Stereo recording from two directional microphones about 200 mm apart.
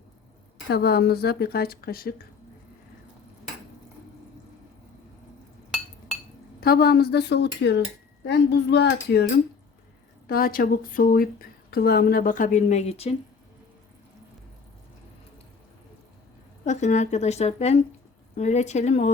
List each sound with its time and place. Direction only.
0.7 s speech: 50° left (ahead or behind)
6.6 s speech: 50° left (ahead or behind)
10.2 s speech: 45° left (ahead or behind); by 13.1 s 30° left (ahead or behind)
16.6 s speech: 35° left (ahead or behind)